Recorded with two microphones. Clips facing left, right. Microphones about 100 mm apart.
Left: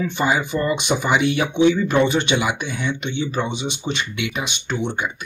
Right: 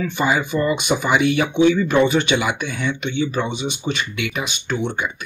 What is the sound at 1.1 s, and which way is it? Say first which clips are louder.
Speech: right 2 dB; 50° right (ahead or behind).